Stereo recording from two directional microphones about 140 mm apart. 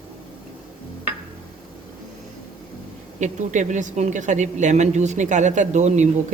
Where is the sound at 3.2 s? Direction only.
60° right (ahead or behind).